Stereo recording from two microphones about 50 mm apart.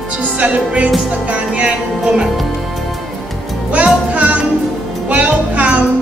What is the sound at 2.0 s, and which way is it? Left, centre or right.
Speech, centre.